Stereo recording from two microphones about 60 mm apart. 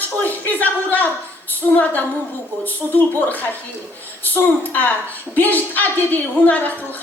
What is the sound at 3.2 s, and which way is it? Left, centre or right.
A woman's voice, left.